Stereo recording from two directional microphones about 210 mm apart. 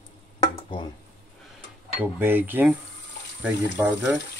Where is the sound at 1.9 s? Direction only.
10° right (ahead or behind).